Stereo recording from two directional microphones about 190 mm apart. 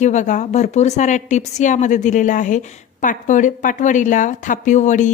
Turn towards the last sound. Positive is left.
turn(degrees=40)  # may be behind; listen again after turning